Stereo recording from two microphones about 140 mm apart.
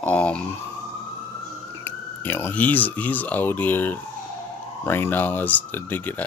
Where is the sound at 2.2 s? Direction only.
15° left (ahead or behind).